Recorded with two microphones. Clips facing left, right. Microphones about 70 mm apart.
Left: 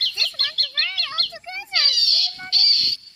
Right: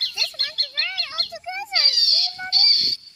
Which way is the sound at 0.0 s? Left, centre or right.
Right.